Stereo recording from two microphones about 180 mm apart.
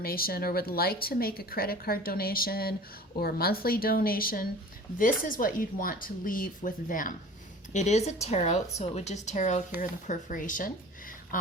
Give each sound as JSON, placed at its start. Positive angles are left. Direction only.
{"t": 0.0, "sound": "a woman's voice", "side_deg": 55}